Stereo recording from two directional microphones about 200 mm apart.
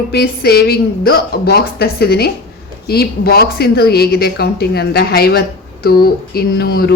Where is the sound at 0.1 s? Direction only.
55° left (ahead or behind).